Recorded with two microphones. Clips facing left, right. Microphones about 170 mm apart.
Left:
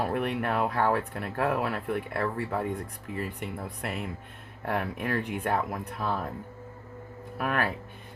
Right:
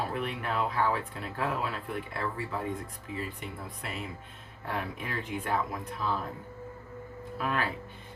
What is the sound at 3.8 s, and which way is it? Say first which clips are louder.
Speech: left 4 dB; 55° left (ahead or behind).